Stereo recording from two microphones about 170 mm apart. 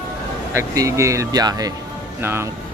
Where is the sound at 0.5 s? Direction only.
15° right (ahead or behind).